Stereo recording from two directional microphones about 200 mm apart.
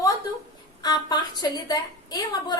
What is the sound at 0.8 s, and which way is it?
A woman's voice, 20° left (ahead or behind).